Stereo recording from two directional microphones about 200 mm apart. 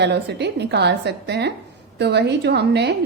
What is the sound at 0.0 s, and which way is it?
Speech, 55° right (ahead or behind).